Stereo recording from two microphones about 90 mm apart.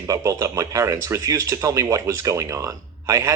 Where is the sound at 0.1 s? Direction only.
35° right (ahead or behind).